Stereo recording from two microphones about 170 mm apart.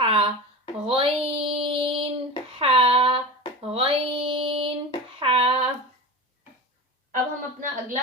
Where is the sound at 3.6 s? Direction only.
35° right (ahead or behind).